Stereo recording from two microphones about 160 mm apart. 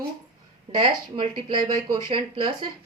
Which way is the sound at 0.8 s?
35° right (ahead or behind).